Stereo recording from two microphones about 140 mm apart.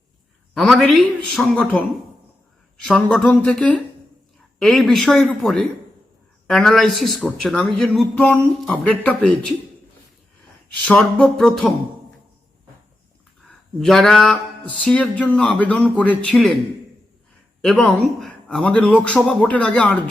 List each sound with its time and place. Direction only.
0.5 s a man's voice: centre (ahead or behind)
2.8 s a man's voice: 5° left (ahead or behind)
10.8 s a man's voice: 10° left (ahead or behind)
13.7 s a man's voice: centre (ahead or behind)
17.6 s a man's voice: centre (ahead or behind)